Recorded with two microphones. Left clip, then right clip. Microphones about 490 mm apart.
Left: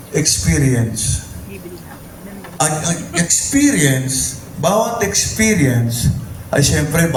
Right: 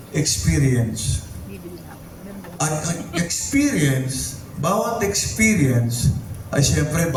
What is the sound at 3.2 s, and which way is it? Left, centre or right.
A man's voice, right.